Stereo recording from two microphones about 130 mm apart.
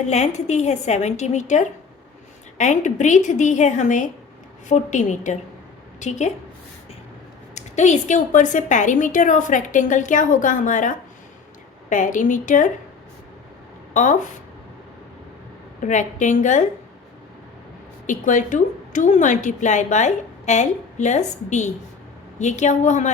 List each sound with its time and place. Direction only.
0.1 s a woman's voice: 60° left (ahead or behind)
7.5 s a woman's voice: 65° left (ahead or behind)
13.9 s a woman's voice: 75° left (ahead or behind)
15.8 s a woman's voice: 70° left (ahead or behind)
18.0 s a woman's voice: 80° left